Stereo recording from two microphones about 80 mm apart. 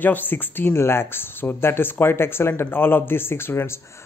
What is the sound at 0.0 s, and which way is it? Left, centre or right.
Speech, left.